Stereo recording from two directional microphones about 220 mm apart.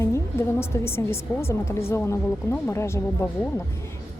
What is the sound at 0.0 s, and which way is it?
Speech, 10° left (ahead or behind).